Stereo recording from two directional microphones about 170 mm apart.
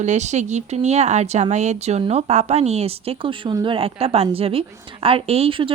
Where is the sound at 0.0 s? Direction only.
45° right (ahead or behind).